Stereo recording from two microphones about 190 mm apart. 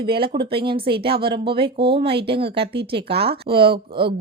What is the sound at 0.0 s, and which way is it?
Speech, 25° right (ahead or behind).